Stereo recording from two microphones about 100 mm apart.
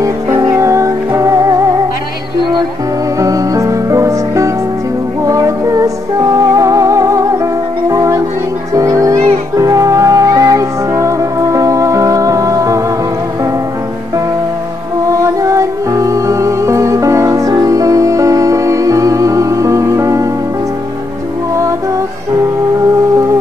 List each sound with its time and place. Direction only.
0.0 s music: 35° right (ahead or behind)
3.2 s music: 35° right (ahead or behind)
15.1 s music: 35° right (ahead or behind)